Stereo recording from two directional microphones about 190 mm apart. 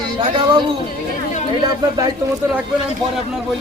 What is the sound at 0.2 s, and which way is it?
Speech, 25° right (ahead or behind).